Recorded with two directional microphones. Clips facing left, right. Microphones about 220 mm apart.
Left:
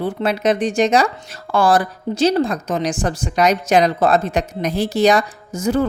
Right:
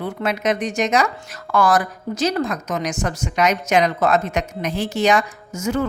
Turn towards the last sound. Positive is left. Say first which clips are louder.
# left 4 dB
turn(degrees=35)  # may be behind; listen again after turning